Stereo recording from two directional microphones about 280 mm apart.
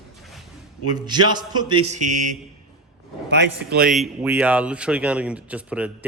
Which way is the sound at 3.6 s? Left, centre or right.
Right.